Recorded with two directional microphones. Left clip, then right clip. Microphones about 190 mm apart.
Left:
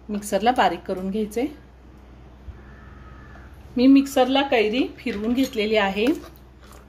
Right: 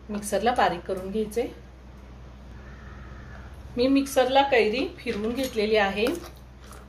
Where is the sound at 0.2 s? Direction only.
45° left (ahead or behind).